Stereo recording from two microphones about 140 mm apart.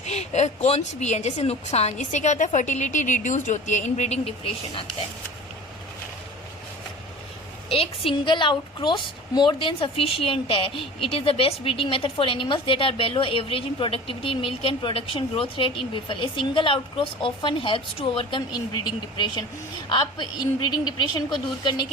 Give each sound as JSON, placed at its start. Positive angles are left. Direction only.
{"t": 0.0, "sound": "a woman's voice", "side_deg": 55}
{"t": 7.7, "sound": "a woman's voice", "side_deg": 45}